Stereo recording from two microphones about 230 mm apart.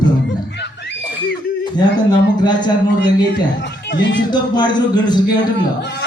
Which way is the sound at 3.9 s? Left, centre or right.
Left.